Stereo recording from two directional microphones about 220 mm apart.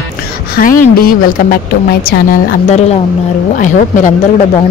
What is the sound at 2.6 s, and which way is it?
Speech, 30° left (ahead or behind).